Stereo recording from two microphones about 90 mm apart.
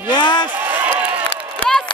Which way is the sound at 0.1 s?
55° left (ahead or behind).